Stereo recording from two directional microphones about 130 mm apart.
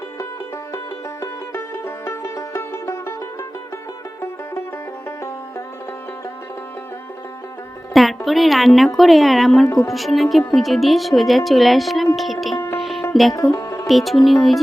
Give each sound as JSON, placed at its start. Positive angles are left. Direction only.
{"t": 1.2, "sound": "music", "side_deg": 20}
{"t": 5.0, "sound": "banjo", "side_deg": 20}
{"t": 7.9, "sound": "a woman's voice", "side_deg": 0}
{"t": 12.7, "sound": "music", "side_deg": 0}
{"t": 13.3, "sound": "speech", "side_deg": 25}
{"t": 13.8, "sound": "speech", "side_deg": 0}